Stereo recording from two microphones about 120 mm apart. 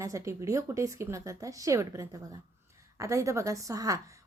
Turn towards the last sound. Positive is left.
turn(degrees=-30)  # may be behind; listen again after turning